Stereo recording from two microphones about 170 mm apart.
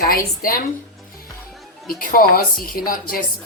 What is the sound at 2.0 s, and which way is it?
Speech, 55° left (ahead or behind).